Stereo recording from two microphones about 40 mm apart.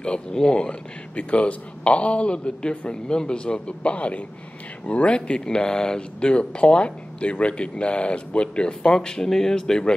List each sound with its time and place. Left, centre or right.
0.0 s speech: centre
0.7 s speech: left